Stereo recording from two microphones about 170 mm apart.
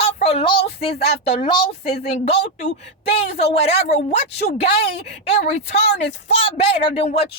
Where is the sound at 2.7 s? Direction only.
80° left.